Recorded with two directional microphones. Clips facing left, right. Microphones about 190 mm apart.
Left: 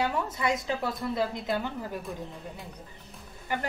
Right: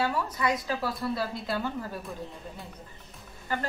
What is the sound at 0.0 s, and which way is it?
Speech, 20° left (ahead or behind).